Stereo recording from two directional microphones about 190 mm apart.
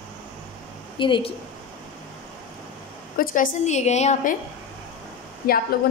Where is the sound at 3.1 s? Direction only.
45° left (ahead or behind).